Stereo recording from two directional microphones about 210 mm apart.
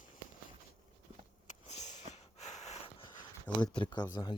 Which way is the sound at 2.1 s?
35° left (ahead or behind).